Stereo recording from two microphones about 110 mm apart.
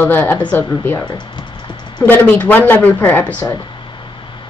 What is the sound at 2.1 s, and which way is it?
Speech, 15° left (ahead or behind).